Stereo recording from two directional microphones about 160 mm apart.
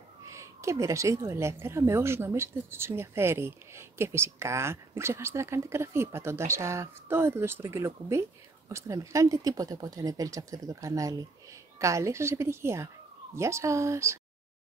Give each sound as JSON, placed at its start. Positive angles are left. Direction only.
{"t": 0.3, "sound": "speech", "side_deg": -20}